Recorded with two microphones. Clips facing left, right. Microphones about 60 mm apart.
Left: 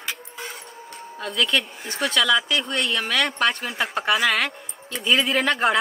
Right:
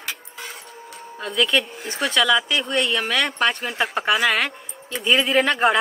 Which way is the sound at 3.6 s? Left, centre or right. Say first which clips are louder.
Right 2 dB; right.